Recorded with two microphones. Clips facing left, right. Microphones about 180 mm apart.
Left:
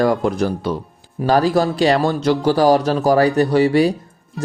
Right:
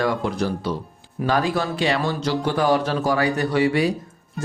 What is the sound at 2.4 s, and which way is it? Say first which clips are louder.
Speech: left 6 dB; 35° left (ahead or behind).